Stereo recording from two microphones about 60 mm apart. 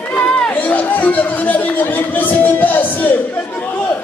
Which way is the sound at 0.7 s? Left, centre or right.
Left.